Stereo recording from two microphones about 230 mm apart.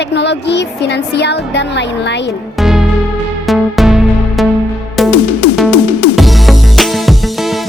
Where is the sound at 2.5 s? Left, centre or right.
Centre.